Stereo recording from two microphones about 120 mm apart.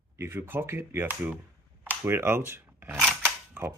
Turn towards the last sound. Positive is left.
turn(degrees=-20)  # may be behind; listen again after turning